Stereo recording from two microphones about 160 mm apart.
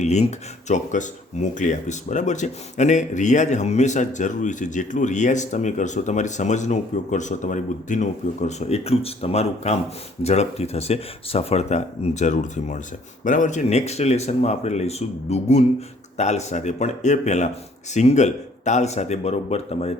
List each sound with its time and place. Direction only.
0.0 s speech: 45° left (ahead or behind)